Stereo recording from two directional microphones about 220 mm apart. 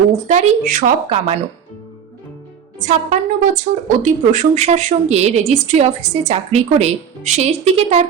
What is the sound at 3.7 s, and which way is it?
A woman's voice, 30° right (ahead or behind).